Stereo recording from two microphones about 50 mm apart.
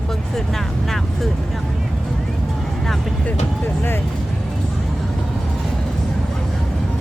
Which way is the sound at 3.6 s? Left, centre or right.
Left.